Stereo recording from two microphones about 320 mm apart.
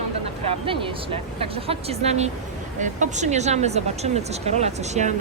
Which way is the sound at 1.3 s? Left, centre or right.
Centre.